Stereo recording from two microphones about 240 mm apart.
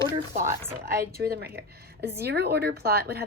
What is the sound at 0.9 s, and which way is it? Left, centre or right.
A woman's voice, right.